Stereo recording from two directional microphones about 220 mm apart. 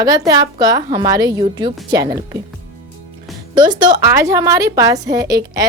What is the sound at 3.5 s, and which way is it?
A woman's voice, 20° right (ahead or behind).